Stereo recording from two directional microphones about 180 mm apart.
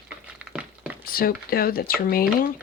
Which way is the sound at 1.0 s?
55° left (ahead or behind).